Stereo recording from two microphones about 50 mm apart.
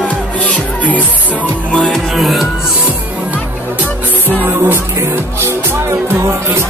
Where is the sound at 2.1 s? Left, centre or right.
Centre.